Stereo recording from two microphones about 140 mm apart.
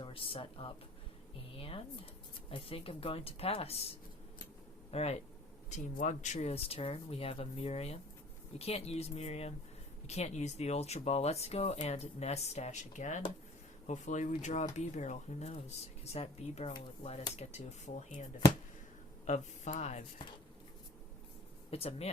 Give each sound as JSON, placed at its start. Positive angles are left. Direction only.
{"t": 0.0, "sound": "speech", "side_deg": 40}
{"t": 5.7, "sound": "speech", "side_deg": 60}
{"t": 21.7, "sound": "speech", "side_deg": 45}